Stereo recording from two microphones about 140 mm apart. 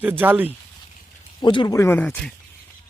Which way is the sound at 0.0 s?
15° right (ahead or behind).